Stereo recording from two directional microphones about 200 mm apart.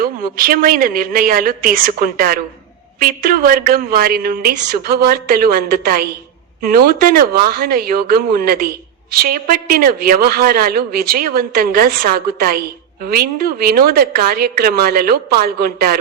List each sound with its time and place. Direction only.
0.0 s a woman's voice: 45° right (ahead or behind)